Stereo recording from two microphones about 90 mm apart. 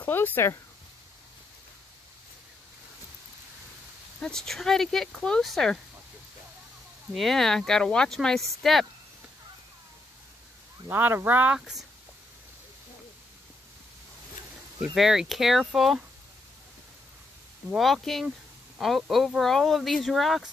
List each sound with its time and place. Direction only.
0.0 s speech: 20° left (ahead or behind)
4.2 s speech: 5° left (ahead or behind)
7.2 s speech: 5° left (ahead or behind)
10.9 s speech: 20° right (ahead or behind)
15.0 s speech: 5° right (ahead or behind)
17.7 s speech: centre (ahead or behind)